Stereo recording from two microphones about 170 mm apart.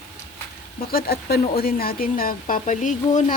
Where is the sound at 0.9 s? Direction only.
60° left (ahead or behind).